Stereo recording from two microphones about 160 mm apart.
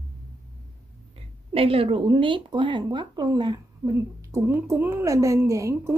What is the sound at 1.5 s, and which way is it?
Speech, 35° right (ahead or behind).